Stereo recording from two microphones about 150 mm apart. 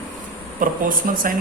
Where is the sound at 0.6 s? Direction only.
65° right (ahead or behind).